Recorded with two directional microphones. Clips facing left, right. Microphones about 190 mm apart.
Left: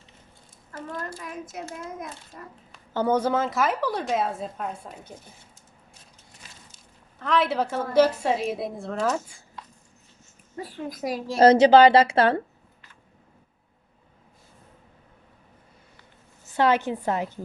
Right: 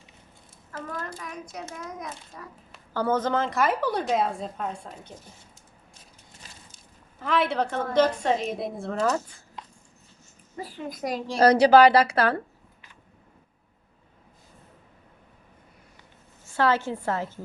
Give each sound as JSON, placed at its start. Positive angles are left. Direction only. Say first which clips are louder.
{"t": 2.9, "sound": "a woman's voice", "louder": "left 2 dB", "side_deg": 15}
{"t": 7.2, "sound": "a woman's voice", "louder": "left 1 dB", "side_deg": 0}
{"t": 9.6, "sound": "a sound", "louder": "right 1 dB", "side_deg": -20}
{"t": 10.6, "sound": "a woman's voice", "louder": "left 1 dB", "side_deg": 0}
{"t": 11.3, "sound": "speech", "louder": "left 2 dB", "side_deg": 25}
{"t": 16.6, "sound": "a woman's voice", "louder": "left 2 dB", "side_deg": 20}